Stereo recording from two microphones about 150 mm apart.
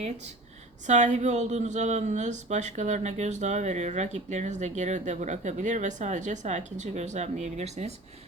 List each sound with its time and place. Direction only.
0.9 s speech: 50° right (ahead or behind)